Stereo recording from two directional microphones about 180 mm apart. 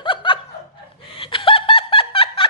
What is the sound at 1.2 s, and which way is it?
Snicker, 30° left (ahead or behind).